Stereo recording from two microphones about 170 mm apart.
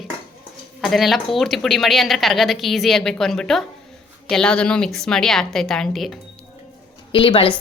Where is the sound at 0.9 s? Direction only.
Centre (ahead or behind).